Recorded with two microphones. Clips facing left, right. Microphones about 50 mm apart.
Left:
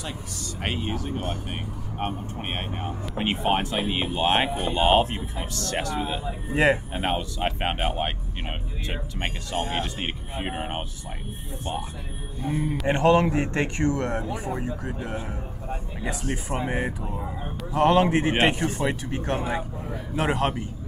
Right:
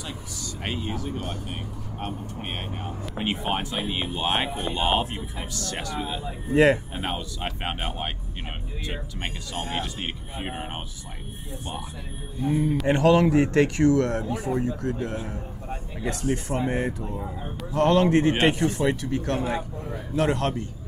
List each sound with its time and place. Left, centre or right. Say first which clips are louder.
0.7 s speech: left 1 dB; left
1.2 s speech: left 2 dB; left
3.2 s speech: left 3 dB; centre
5.7 s speech: left 5 dB; left
5.9 s speech: left 2 dB; centre
12.4 s speech: right 3 dB; centre
12.9 s speech: right 1 dB; left